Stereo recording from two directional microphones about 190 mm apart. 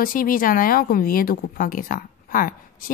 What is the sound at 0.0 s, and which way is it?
Speech, 50° left (ahead or behind).